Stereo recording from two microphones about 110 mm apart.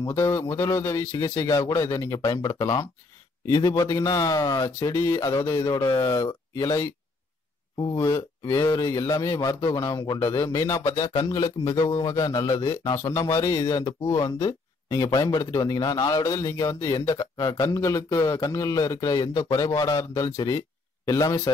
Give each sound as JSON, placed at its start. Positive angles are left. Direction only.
{"t": 0.0, "sound": "a man's voice", "side_deg": 25}